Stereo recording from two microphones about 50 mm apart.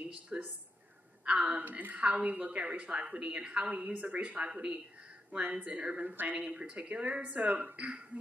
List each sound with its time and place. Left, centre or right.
0.3 s a woman's voice: right
6.0 s speech: right
6.3 s a woman's voice: right